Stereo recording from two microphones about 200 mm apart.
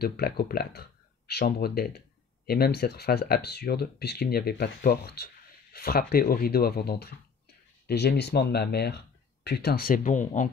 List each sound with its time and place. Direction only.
0.0 s speech: 50° left (ahead or behind)